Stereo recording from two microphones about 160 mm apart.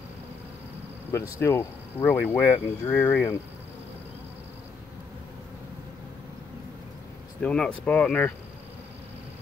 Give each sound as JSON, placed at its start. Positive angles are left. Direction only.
{"t": 1.1, "sound": "speech", "side_deg": 15}
{"t": 7.4, "sound": "speech", "side_deg": 5}